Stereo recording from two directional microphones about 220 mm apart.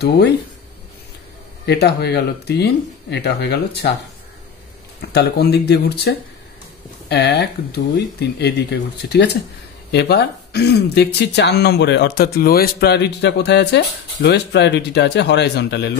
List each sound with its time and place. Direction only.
1.7 s speech: 50° left (ahead or behind)
5.0 s speech: 45° left (ahead or behind)